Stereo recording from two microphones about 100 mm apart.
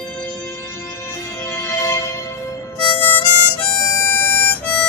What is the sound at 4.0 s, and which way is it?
Music, 20° left (ahead or behind).